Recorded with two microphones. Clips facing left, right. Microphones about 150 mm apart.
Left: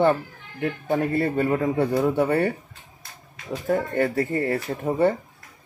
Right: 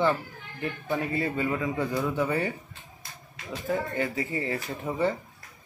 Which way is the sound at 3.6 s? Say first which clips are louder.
Left 6 dB; 50° left (ahead or behind).